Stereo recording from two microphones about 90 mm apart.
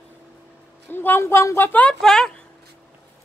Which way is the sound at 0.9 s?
25° left (ahead or behind).